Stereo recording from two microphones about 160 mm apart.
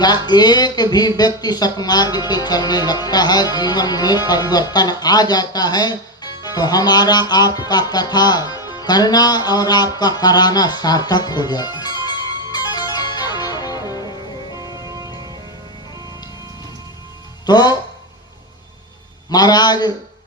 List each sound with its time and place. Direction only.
0.0 s speech: 25° left (ahead or behind)
14.6 s music: 20° right (ahead or behind)
17.4 s speech: 25° left (ahead or behind)
19.3 s a man's voice: 25° left (ahead or behind)